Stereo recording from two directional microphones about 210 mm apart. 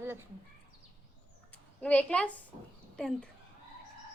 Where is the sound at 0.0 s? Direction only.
10° right (ahead or behind).